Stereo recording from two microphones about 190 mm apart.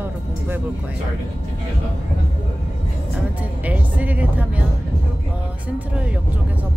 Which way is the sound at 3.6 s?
10° right (ahead or behind).